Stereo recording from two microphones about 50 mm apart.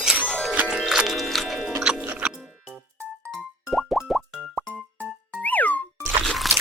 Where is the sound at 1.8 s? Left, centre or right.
Centre.